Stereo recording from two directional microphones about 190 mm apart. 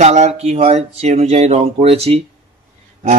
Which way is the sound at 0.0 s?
35° right (ahead or behind).